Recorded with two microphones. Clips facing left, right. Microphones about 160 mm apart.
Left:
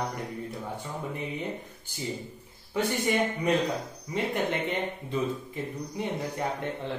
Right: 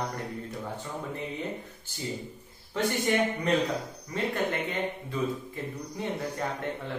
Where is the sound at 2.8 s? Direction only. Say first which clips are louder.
Even; 10° left (ahead or behind).